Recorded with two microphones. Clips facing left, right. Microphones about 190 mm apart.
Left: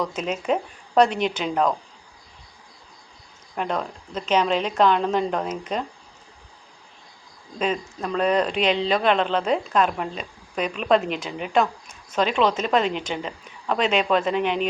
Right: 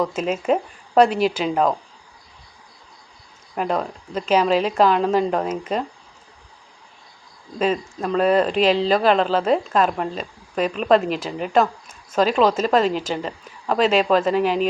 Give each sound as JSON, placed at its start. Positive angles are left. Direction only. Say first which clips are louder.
{"t": 0.0, "sound": "speech", "louder": "right 4 dB", "side_deg": -5}
{"t": 3.5, "sound": "speech", "louder": "right 4 dB", "side_deg": -5}
{"t": 7.6, "sound": "speech", "louder": "right 4 dB", "side_deg": -5}
{"t": 12.7, "sound": "a woman's voice", "louder": "right 3 dB", "side_deg": -45}
{"t": 13.2, "sound": "speech", "louder": "right 3 dB", "side_deg": 0}